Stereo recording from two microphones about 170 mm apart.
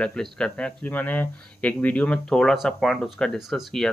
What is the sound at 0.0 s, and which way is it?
Speech, 5° left (ahead or behind).